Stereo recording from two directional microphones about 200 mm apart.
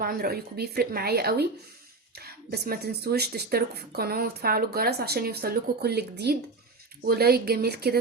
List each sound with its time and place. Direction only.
0.0 s speech: 50° right (ahead or behind)